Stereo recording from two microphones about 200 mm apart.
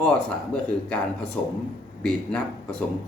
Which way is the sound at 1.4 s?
5° left (ahead or behind).